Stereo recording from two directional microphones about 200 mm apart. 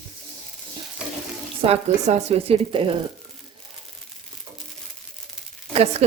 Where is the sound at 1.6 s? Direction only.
30° right (ahead or behind).